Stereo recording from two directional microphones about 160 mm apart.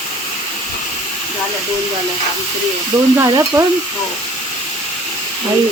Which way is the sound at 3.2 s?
20° right (ahead or behind).